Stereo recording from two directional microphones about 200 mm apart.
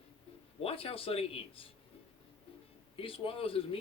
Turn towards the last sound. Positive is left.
turn(degrees=25)  # may be behind; listen again after turning